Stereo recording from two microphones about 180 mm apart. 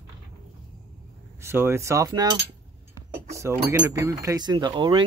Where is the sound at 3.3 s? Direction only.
15° right (ahead or behind).